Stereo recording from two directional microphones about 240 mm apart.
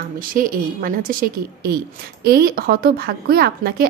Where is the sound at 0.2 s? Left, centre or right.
Right.